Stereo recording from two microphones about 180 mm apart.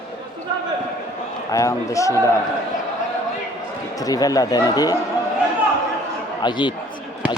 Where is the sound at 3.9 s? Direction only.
20° left (ahead or behind).